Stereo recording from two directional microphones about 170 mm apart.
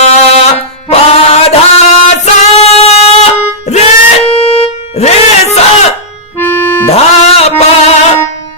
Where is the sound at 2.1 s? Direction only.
40° left (ahead or behind).